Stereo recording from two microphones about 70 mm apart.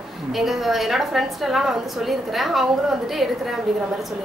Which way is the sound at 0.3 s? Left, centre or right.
Centre.